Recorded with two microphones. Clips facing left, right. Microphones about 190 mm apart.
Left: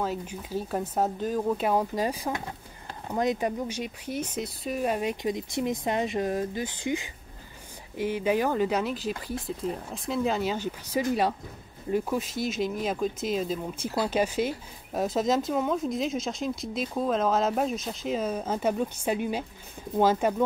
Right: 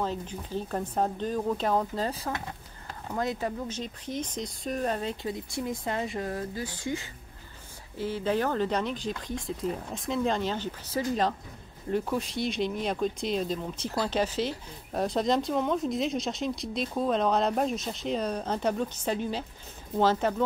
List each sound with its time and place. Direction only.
0.0 s speech: 10° left (ahead or behind)